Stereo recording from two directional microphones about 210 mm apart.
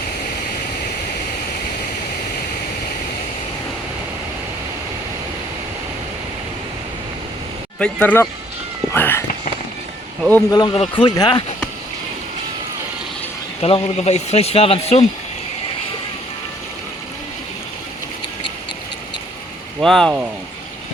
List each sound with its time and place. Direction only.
7.8 s speech: 5° left (ahead or behind)
10.5 s speech: 20° left (ahead or behind)
13.6 s speech: 25° left (ahead or behind)
19.8 s speech: centre (ahead or behind)